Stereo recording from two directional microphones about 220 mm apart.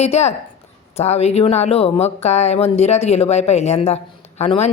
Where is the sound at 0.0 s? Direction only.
30° left (ahead or behind).